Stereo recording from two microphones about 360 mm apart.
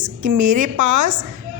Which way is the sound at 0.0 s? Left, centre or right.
Right.